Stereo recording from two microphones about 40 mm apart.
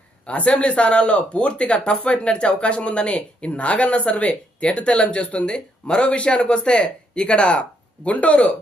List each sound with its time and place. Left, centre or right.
0.3 s speech: left